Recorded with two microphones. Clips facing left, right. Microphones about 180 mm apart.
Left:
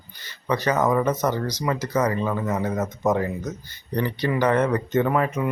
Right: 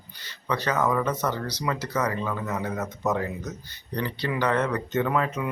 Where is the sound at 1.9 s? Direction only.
25° left (ahead or behind).